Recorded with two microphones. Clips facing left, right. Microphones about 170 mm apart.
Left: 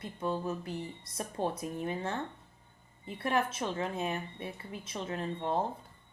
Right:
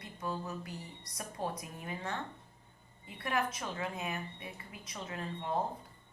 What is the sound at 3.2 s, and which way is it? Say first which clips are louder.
A woman's voice: left 4 dB; 30° left (ahead or behind).